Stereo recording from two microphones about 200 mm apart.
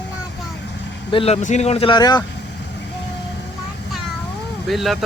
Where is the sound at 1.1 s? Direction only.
30° left (ahead or behind).